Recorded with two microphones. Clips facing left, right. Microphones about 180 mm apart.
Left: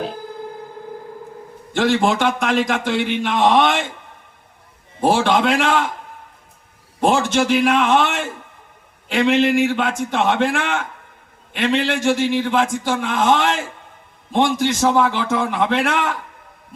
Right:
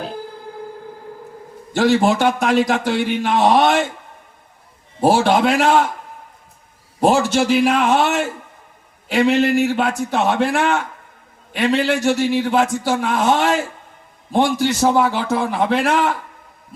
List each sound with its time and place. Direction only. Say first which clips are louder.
2.1 s a man's voice: right 2 dB; 40° right (ahead or behind)
4.9 s a man's voice: right 2 dB; 40° right (ahead or behind)
7.0 s a man's voice: right 2 dB; 35° right (ahead or behind)
7.3 s speech: right 1 dB; 5° right (ahead or behind)
7.8 s a man's voice: right 1 dB; 40° right (ahead or behind)